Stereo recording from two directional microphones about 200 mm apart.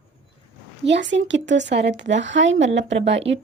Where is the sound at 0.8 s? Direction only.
65° right (ahead or behind).